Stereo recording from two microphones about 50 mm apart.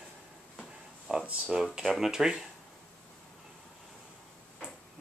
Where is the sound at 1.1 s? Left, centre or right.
Centre.